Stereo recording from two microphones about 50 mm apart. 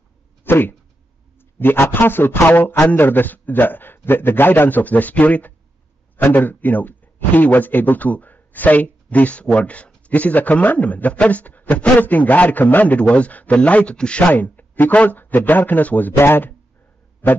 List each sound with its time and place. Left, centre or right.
0.4 s a man's voice: left
14.3 s a man's voice: left
16.2 s a man's voice: left